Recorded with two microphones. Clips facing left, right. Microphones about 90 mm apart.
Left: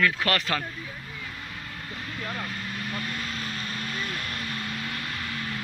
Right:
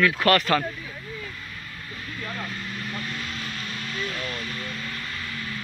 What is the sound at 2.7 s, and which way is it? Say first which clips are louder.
Vehicle: even; 10° left (ahead or behind).